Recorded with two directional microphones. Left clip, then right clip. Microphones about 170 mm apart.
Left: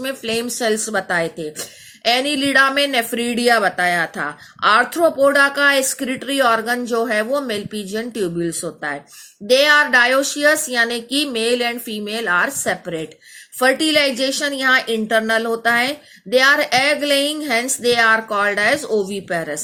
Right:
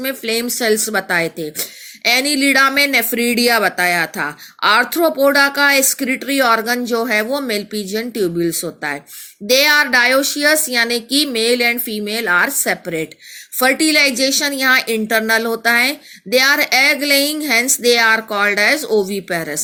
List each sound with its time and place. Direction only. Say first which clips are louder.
0.0 s speech: right 2 dB; 30° right (ahead or behind)
3.2 s speech: left 1 dB; 45° right (ahead or behind)